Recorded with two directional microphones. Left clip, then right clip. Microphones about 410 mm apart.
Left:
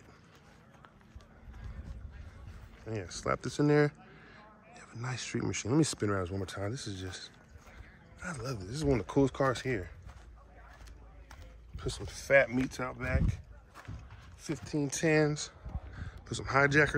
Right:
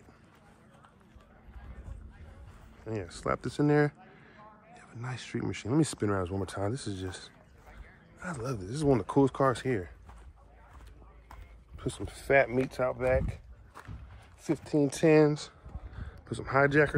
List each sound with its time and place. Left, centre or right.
2.8 s speech: centre
11.7 s speech: centre
14.4 s speech: centre